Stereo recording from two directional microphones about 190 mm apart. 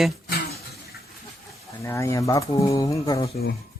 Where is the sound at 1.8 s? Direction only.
15° left (ahead or behind).